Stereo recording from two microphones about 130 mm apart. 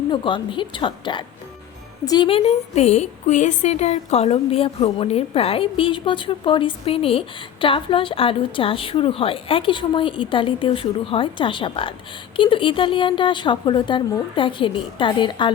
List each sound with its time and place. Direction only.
0.1 s speech: 40° left (ahead or behind)
2.3 s a woman's voice: 55° left (ahead or behind); by 15.5 s 40° left (ahead or behind)